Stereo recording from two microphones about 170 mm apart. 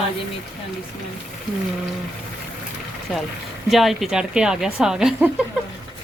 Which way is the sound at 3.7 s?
Centre (ahead or behind).